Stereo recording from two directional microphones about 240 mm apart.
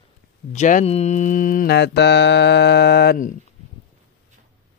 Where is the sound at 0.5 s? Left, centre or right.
Left.